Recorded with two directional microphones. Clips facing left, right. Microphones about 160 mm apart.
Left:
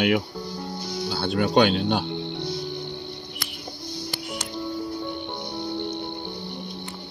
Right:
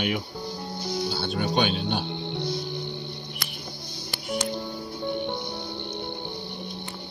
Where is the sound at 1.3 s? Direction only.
90° left.